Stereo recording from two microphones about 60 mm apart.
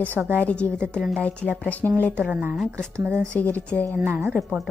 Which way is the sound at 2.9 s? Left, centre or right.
Right.